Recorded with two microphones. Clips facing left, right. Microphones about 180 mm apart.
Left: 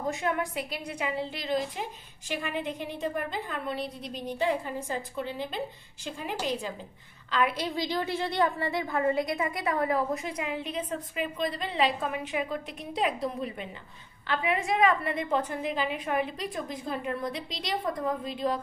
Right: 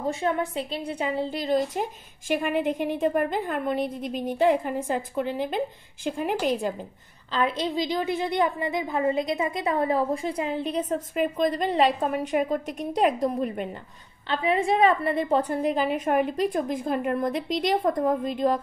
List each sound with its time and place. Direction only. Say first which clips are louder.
0.1 s a woman's voice: right 4 dB; 30° right (ahead or behind)
1.4 s a woman's voice: right 7 dB; 45° right (ahead or behind)
7.2 s a woman's voice: right 3 dB; 25° right (ahead or behind); by 13.7 s 50° right (ahead or behind)
14.2 s a woman's voice: right 5 dB; 30° right (ahead or behind); by 18.6 s 45° right (ahead or behind)